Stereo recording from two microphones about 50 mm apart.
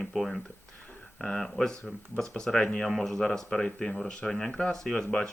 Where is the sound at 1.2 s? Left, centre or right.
Centre.